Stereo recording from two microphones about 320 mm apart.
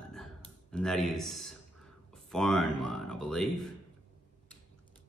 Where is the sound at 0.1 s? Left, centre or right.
Centre.